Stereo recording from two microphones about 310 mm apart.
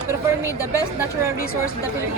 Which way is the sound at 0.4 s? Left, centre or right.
Centre.